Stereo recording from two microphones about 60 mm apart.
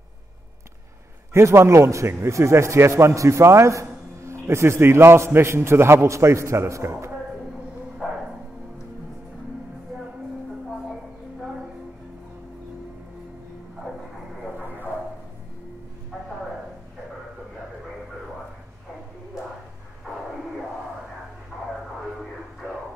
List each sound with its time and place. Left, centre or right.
1.3 s a man's voice: right